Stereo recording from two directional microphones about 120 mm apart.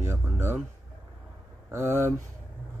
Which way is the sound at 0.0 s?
20° right (ahead or behind).